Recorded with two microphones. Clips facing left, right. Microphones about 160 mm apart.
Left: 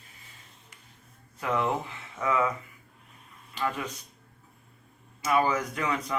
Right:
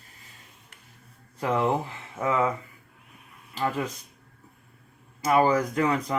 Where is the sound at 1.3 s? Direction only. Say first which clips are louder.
Right 3 dB; 30° right (ahead or behind).